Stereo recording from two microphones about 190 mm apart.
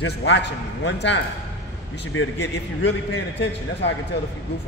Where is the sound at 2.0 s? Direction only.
80° left.